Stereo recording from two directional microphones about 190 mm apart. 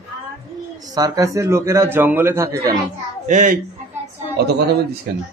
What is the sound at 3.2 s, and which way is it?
Speech, 45° right (ahead or behind).